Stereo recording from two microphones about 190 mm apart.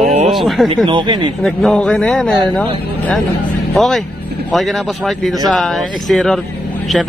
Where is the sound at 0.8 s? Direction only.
30° right (ahead or behind).